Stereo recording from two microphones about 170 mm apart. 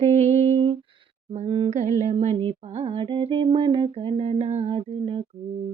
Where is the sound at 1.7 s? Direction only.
45° right (ahead or behind).